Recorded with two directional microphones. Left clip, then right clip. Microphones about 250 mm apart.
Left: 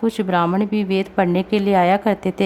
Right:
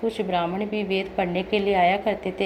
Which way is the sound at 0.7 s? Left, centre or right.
Left.